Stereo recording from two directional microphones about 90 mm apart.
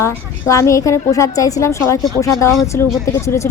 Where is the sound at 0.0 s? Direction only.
35° left (ahead or behind).